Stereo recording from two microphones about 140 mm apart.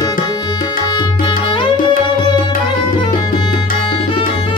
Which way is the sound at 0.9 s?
35° left (ahead or behind).